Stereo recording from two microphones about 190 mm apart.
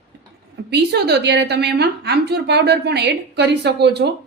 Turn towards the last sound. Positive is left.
turn(degrees=-60)  # may be behind; listen again after turning